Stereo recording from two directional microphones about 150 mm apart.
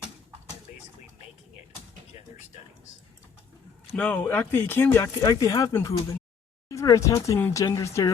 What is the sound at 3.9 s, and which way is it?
Speech, 10° left (ahead or behind).